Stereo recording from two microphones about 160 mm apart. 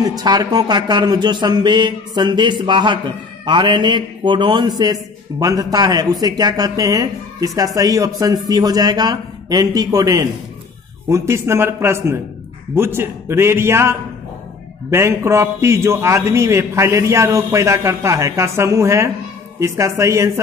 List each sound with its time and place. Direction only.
0.0 s a man's voice: 25° right (ahead or behind)